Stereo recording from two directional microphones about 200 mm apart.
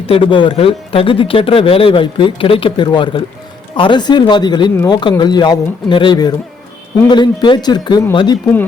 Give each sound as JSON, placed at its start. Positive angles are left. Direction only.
{"t": 0.1, "sound": "speech", "side_deg": 25}